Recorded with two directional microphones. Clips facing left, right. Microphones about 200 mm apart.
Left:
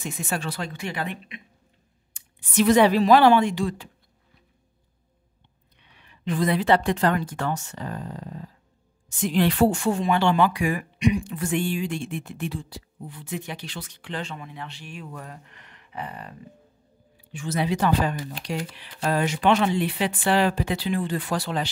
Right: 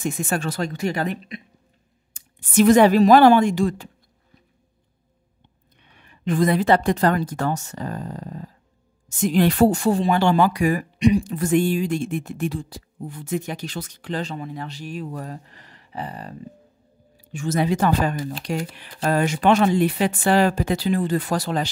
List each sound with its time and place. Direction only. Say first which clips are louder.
0.0 s speech: right 5 dB; 50° right (ahead or behind)
5.9 s a woman's voice: right 4 dB; 50° right (ahead or behind)